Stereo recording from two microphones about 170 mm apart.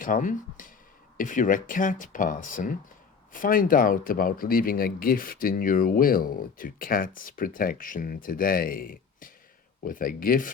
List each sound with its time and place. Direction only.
0.0 s speech: 50° left (ahead or behind)